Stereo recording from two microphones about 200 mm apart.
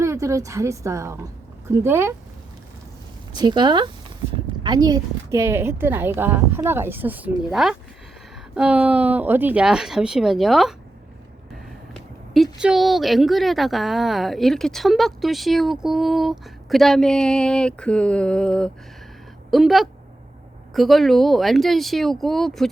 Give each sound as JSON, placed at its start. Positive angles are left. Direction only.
{"t": 0.0, "sound": "a woman's voice", "side_deg": -15}
{"t": 3.3, "sound": "a woman's voice", "side_deg": -20}
{"t": 12.3, "sound": "speech", "side_deg": 0}